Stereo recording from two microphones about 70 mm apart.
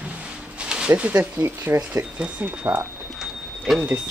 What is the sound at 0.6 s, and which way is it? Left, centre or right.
Speech, centre.